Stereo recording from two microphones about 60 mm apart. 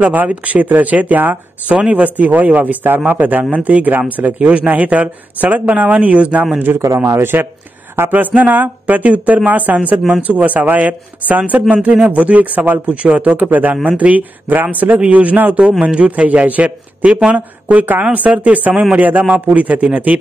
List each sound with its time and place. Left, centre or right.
0.0 s speech: right
7.1 s speech: right
8.4 s speech: right